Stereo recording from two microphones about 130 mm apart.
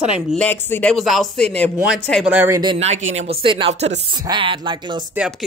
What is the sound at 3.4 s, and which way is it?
A woman's voice, 40° right (ahead or behind).